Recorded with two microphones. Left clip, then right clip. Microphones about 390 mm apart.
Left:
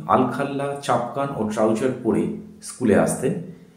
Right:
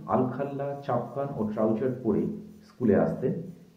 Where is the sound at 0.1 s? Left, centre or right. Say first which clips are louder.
Left 8 dB; right.